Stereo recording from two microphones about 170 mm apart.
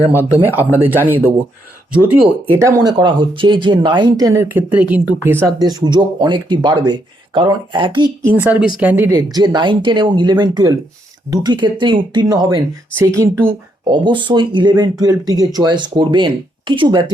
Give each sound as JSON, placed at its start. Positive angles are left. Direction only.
{"t": 0.1, "sound": "speech", "side_deg": -10}
{"t": 2.8, "sound": "speech", "side_deg": -25}
{"t": 5.6, "sound": "speech", "side_deg": -25}
{"t": 8.2, "sound": "speech", "side_deg": 10}
{"t": 8.4, "sound": "speech", "side_deg": -10}
{"t": 13.9, "sound": "speech", "side_deg": -30}